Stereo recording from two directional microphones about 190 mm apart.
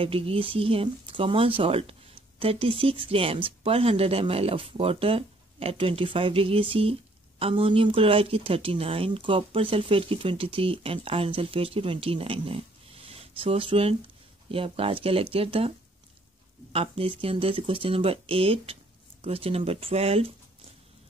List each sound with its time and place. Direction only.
0.0 s speech: 30° right (ahead or behind)
16.7 s speech: 30° right (ahead or behind)